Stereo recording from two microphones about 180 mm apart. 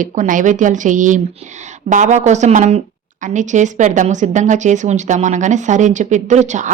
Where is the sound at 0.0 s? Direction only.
45° right (ahead or behind).